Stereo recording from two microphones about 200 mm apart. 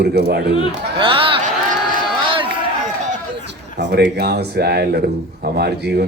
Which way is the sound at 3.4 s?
60° right (ahead or behind).